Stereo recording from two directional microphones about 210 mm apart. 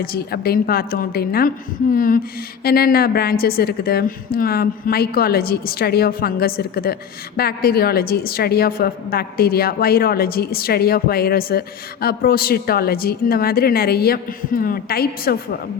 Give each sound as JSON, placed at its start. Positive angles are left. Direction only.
{"t": 0.0, "sound": "a woman's voice", "side_deg": 45}